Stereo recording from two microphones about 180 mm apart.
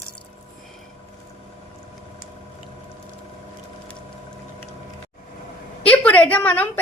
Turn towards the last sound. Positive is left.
turn(degrees=10)  # may be behind; listen again after turning